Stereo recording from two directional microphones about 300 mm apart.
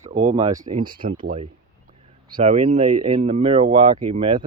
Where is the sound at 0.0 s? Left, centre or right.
Right.